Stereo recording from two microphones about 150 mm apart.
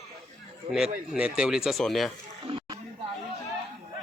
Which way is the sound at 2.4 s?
35° right (ahead or behind).